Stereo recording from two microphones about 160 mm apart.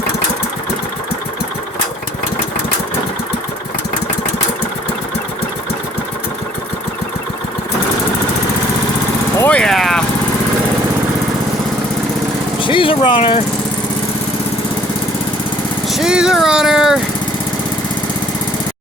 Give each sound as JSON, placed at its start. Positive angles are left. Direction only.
{"t": 9.4, "sound": "vehicle", "side_deg": 5}
{"t": 12.6, "sound": "vehicle", "side_deg": 30}
{"t": 15.9, "sound": "vehicle", "side_deg": -5}